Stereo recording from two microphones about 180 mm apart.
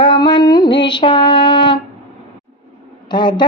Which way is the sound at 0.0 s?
25° left (ahead or behind).